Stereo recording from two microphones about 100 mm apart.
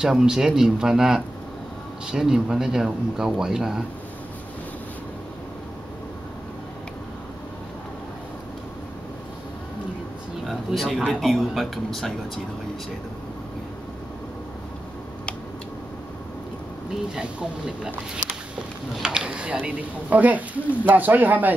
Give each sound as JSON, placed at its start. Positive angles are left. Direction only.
{"t": 0.0, "sound": "speech", "side_deg": -5}
{"t": 10.4, "sound": "a sound", "side_deg": 0}
{"t": 11.1, "sound": "speech", "side_deg": 0}
{"t": 17.1, "sound": "speech", "side_deg": -10}